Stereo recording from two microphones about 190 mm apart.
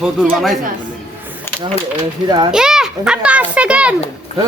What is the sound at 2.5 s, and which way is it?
A child's voice, 5° right (ahead or behind).